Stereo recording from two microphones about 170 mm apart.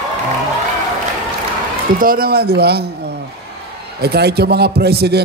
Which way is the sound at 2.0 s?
60° right (ahead or behind).